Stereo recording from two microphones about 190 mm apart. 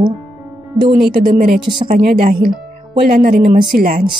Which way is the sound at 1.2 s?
50° right (ahead or behind).